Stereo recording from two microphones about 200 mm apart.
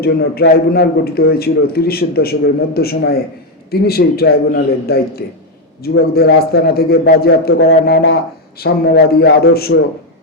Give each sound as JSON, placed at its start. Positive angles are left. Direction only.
{"t": 0.0, "sound": "a man's voice", "side_deg": 50}